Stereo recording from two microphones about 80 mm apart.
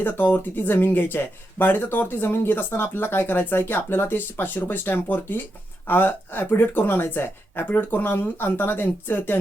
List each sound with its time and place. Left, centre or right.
0.0 s speech: left